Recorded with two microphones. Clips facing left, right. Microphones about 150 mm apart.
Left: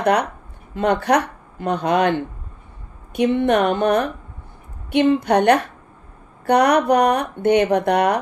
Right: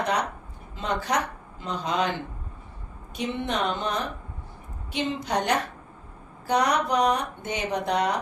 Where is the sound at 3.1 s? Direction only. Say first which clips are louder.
Left 12 dB; 60° left (ahead or behind).